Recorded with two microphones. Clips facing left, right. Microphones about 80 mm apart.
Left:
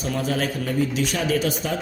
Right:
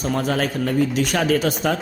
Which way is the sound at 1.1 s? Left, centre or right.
Right.